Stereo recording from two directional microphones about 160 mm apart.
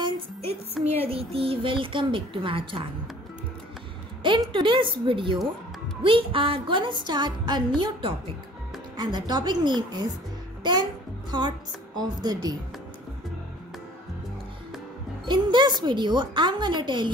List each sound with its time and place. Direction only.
0.0 s music: 40° right (ahead or behind)
1.0 s a woman's voice: 35° right (ahead or behind)
4.2 s a woman's voice: 30° right (ahead or behind)
15.2 s a woman's voice: 30° right (ahead or behind)